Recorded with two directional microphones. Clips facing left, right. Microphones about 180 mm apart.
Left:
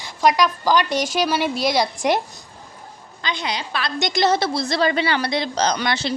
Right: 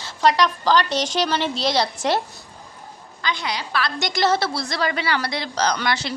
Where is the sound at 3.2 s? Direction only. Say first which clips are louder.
Even; 20° left (ahead or behind).